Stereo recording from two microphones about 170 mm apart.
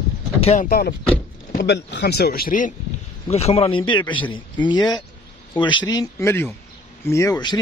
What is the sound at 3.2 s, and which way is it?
Speech, 35° left (ahead or behind).